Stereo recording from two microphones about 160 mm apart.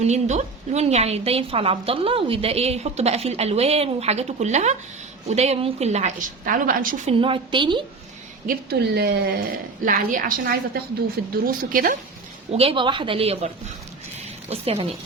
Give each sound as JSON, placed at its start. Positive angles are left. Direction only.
{"t": 0.0, "sound": "a woman's voice", "side_deg": -45}
{"t": 7.1, "sound": "a woman's voice", "side_deg": -35}
{"t": 8.4, "sound": "a woman's voice", "side_deg": -80}
{"t": 9.8, "sound": "a woman's voice", "side_deg": -55}
{"t": 12.5, "sound": "a woman's voice", "side_deg": -35}
{"t": 14.5, "sound": "a woman's voice", "side_deg": -40}